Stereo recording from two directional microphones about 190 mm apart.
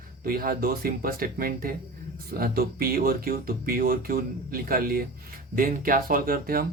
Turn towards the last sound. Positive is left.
turn(degrees=-50)  # may be behind; listen again after turning